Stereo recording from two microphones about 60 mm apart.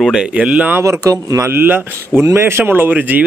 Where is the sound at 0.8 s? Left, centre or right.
Right.